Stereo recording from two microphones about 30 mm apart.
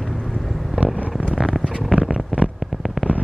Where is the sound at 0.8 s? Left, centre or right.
Right.